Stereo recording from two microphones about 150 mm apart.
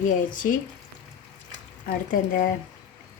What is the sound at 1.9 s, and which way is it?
Speech, 65° left (ahead or behind).